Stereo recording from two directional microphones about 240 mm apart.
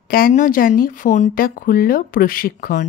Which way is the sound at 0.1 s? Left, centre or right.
Left.